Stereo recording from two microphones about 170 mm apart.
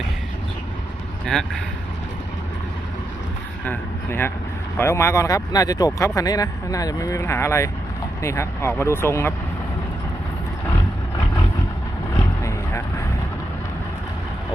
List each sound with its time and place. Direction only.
1.2 s a man's voice: 5° left (ahead or behind)
3.6 s speech: 10° left (ahead or behind)
12.1 s vehicle: 15° left (ahead or behind)